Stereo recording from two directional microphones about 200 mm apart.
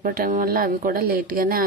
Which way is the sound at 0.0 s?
45° right (ahead or behind).